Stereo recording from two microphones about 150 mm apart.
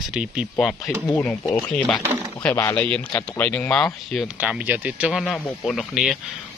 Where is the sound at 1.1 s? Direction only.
10° left (ahead or behind).